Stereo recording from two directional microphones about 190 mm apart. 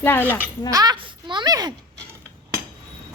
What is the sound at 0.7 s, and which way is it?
A woman's voice, 20° right (ahead or behind).